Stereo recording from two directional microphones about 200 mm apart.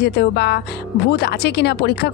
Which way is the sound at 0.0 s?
55° left (ahead or behind).